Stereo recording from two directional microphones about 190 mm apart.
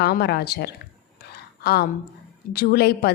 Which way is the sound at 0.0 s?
60° left (ahead or behind).